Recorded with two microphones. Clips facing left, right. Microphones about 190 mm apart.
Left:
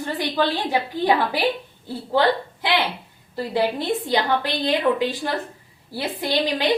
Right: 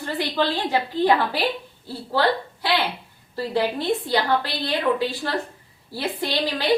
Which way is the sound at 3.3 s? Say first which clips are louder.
Left 1 dB; 15° left (ahead or behind).